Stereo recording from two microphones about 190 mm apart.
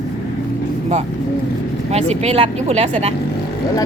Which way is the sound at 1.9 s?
35° right (ahead or behind).